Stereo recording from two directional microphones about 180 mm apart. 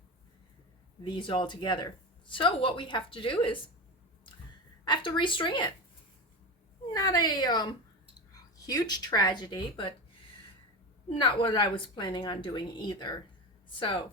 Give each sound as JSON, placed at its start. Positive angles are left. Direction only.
{"t": 1.0, "sound": "a woman's voice", "side_deg": 25}
{"t": 4.9, "sound": "a woman's voice", "side_deg": 25}
{"t": 6.9, "sound": "a woman's voice", "side_deg": 20}
{"t": 11.1, "sound": "a woman's voice", "side_deg": 30}